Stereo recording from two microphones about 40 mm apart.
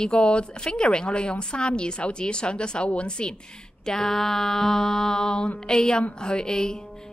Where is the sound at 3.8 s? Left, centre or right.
Centre.